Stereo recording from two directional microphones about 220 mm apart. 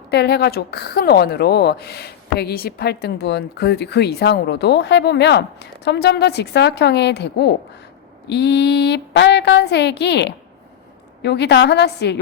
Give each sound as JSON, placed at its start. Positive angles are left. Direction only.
{"t": 0.1, "sound": "a woman's voice", "side_deg": 50}